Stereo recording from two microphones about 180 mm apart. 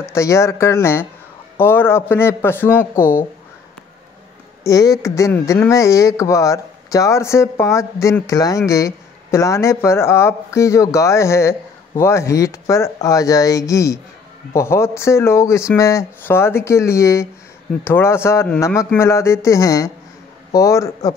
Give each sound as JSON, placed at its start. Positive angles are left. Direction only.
{"t": 0.1, "sound": "speech", "side_deg": 15}
{"t": 4.6, "sound": "speech", "side_deg": 20}